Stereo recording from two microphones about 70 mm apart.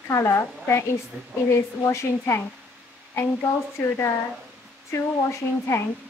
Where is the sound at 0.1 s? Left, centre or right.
Left.